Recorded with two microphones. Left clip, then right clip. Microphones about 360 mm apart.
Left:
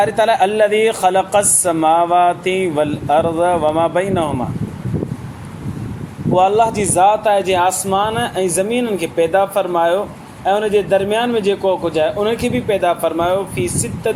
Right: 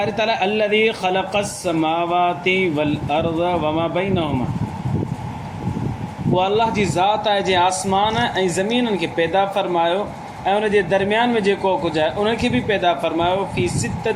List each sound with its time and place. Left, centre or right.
0.0 s a man's voice: centre
6.3 s a man's voice: left